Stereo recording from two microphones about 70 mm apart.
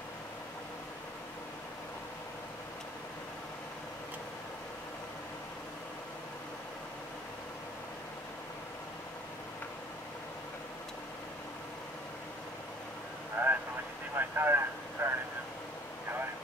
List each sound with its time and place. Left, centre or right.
13.4 s vehicle: right
14.1 s speech: right
15.0 s vehicle: right